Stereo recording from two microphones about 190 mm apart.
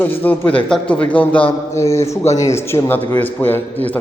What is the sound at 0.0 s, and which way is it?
A man's voice, 10° left (ahead or behind).